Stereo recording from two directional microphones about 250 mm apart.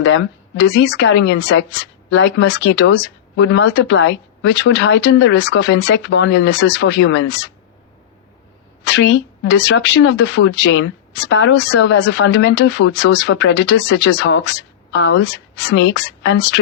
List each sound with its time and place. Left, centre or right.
0.0 s a woman's voice: left
8.8 s a woman's voice: left